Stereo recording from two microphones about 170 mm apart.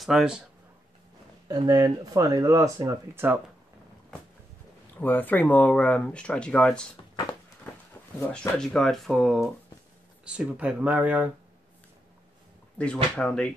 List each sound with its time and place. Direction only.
0.0 s speech: 5° right (ahead or behind)
1.5 s speech: 25° right (ahead or behind)
4.9 s speech: 10° left (ahead or behind)
8.3 s speech: centre (ahead or behind)
12.7 s speech: 5° left (ahead or behind)